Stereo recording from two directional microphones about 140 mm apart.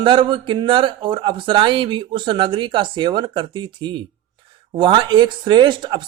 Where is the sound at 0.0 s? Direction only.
35° right (ahead or behind).